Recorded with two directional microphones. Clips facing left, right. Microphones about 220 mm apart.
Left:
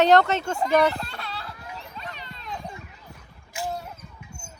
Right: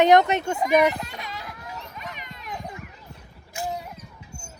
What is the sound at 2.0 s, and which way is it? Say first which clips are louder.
Children playing: right 1 dB; 15° right (ahead or behind).